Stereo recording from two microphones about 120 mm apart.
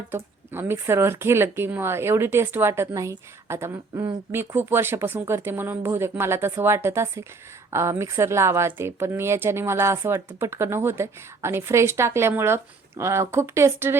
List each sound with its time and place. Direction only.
0.1 s speech: 20° right (ahead or behind)